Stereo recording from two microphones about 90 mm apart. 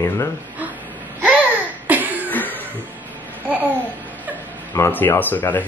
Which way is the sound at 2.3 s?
20° left (ahead or behind).